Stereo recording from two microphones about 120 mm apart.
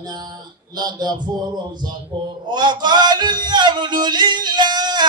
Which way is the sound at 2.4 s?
35° right (ahead or behind).